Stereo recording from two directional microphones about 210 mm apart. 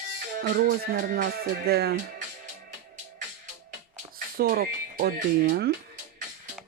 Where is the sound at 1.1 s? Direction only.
50° right (ahead or behind).